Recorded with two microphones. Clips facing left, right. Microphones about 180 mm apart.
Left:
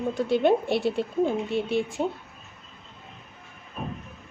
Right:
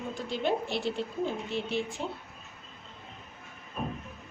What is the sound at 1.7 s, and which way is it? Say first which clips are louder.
Speech: left 7 dB; 55° left (ahead or behind).